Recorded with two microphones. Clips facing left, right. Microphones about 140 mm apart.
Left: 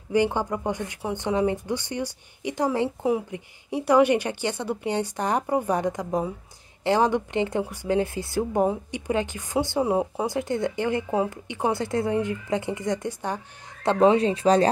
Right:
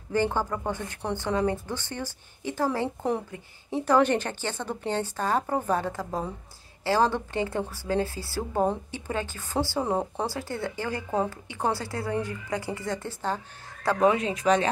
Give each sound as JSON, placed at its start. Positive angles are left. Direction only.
{"t": 0.1, "sound": "speech", "side_deg": 15}
{"t": 3.0, "sound": "speech", "side_deg": 5}
{"t": 10.3, "sound": "speech", "side_deg": 20}
{"t": 13.8, "sound": "speech", "side_deg": 30}